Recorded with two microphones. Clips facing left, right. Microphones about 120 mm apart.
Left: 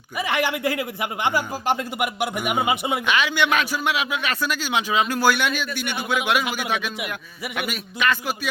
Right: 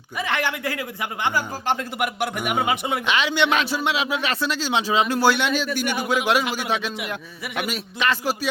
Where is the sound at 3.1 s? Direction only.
25° right (ahead or behind).